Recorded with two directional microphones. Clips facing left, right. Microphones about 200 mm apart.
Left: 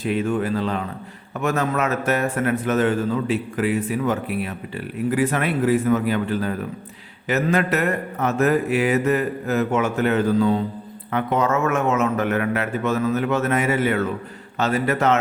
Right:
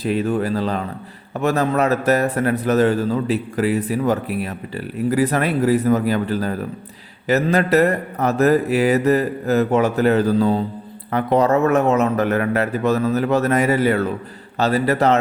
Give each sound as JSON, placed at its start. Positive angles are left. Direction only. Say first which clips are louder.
{"t": 0.0, "sound": "a man's voice", "louder": "right 2 dB", "side_deg": -35}